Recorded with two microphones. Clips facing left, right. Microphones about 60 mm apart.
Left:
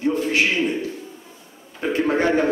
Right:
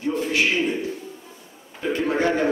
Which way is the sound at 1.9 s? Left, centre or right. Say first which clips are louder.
Left 3 dB; left.